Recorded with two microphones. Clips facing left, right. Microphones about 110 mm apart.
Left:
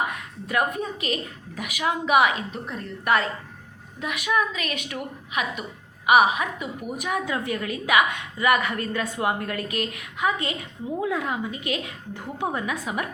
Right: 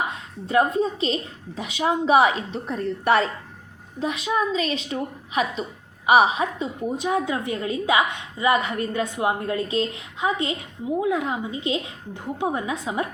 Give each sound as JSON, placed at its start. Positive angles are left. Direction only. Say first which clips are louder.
{"t": 0.1, "sound": "a woman's voice", "louder": "right 5 dB", "side_deg": -25}